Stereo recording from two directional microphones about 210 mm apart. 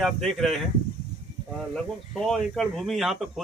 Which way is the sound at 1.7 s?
Centre (ahead or behind).